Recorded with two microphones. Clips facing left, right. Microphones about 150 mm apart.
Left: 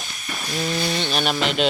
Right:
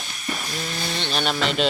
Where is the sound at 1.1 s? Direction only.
5° left (ahead or behind).